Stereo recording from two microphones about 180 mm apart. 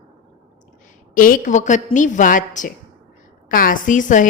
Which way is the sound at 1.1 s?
50° left (ahead or behind).